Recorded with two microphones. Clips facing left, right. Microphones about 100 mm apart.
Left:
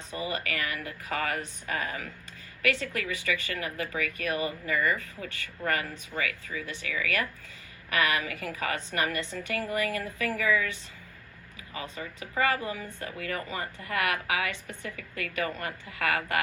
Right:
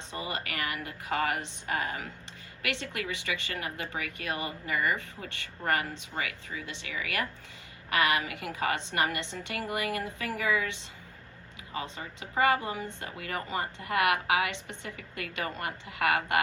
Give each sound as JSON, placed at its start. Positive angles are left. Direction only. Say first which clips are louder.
{"t": 0.1, "sound": "speech", "louder": "left 3 dB", "side_deg": -25}